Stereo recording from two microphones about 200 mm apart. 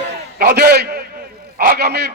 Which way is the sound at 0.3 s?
50° right (ahead or behind).